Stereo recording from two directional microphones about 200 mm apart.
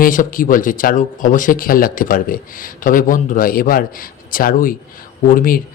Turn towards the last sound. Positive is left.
turn(degrees=45)  # may be behind; listen again after turning